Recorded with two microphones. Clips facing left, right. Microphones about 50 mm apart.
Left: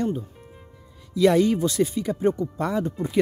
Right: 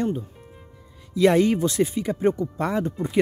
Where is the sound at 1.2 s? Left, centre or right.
Right.